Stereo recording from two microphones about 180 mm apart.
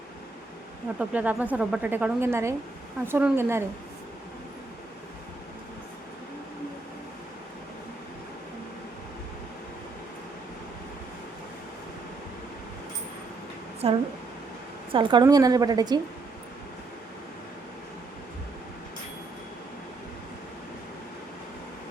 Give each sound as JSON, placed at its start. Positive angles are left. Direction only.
{"t": 0.9, "sound": "speech", "side_deg": -10}
{"t": 13.8, "sound": "a woman's voice", "side_deg": -35}